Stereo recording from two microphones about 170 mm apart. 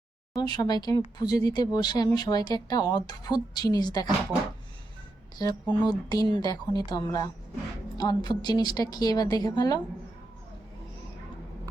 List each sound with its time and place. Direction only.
0.3 s a woman's voice: 25° left (ahead or behind)
5.4 s a woman's voice: 25° left (ahead or behind)